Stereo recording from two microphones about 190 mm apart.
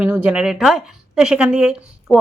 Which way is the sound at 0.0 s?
10° right (ahead or behind).